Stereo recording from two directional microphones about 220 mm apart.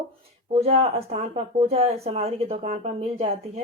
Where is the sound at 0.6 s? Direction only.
30° right (ahead or behind).